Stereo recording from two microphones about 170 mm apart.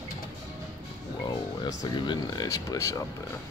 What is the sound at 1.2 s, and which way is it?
Speech, 25° left (ahead or behind).